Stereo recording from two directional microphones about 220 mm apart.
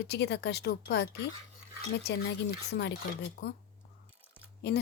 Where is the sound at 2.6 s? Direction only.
50° left (ahead or behind).